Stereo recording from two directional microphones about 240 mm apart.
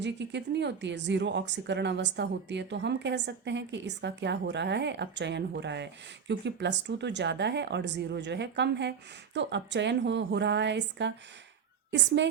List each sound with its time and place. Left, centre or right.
0.0 s a woman's voice: right